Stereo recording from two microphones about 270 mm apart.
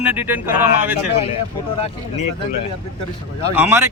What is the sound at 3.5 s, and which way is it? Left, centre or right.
Speech, centre.